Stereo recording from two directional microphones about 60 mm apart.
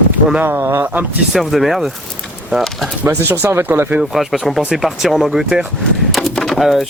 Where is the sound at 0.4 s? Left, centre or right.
Right.